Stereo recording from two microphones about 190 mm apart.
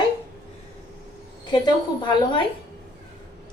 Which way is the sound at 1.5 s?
25° left (ahead or behind).